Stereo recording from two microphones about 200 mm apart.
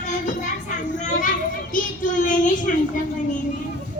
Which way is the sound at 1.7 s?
40° left (ahead or behind).